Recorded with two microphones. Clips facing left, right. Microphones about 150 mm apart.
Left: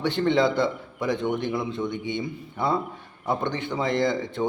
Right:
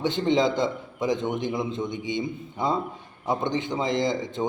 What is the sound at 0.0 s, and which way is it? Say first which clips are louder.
A man's voice: left 1 dB; 20° right (ahead or behind).